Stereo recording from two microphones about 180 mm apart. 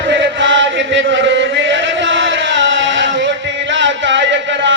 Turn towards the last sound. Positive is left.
turn(degrees=-90)